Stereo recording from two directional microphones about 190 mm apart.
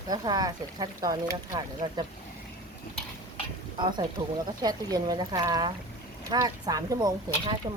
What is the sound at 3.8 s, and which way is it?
Speech, 25° right (ahead or behind).